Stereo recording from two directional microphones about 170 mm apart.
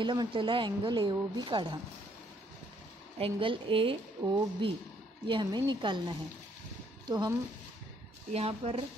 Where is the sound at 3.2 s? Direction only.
30° right (ahead or behind).